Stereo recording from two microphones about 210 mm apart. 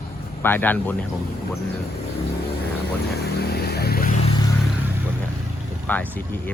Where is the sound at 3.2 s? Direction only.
50° left (ahead or behind).